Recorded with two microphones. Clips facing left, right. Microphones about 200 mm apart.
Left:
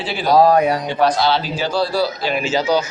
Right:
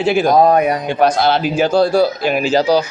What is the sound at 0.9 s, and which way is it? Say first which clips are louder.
Speech: right 3 dB; 50° right (ahead or behind).